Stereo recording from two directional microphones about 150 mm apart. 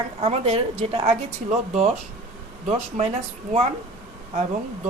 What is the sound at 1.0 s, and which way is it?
Speech, 50° right (ahead or behind).